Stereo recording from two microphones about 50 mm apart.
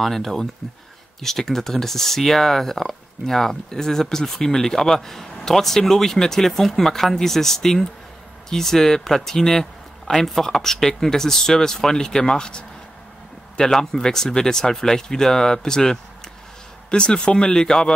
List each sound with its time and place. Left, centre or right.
0.0 s speech: centre